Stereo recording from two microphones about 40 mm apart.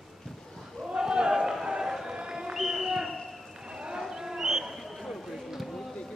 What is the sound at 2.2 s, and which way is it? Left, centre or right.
Basketball bounce, centre.